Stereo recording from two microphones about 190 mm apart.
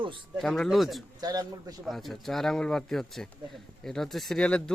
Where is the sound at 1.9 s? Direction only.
Centre (ahead or behind).